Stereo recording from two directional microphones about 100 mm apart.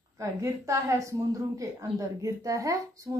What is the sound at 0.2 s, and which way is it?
Speech, 30° right (ahead or behind).